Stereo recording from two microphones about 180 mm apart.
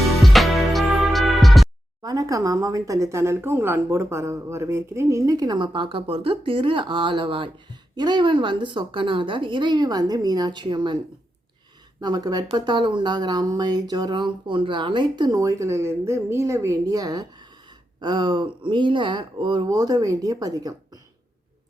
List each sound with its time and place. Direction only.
0.0 s music: centre (ahead or behind)
2.0 s speech: 20° right (ahead or behind)
11.9 s speech: 20° right (ahead or behind)